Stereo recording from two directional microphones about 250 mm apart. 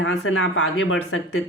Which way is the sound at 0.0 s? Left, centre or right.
Left.